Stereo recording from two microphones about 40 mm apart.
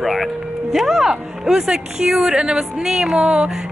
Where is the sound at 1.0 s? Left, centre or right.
Centre.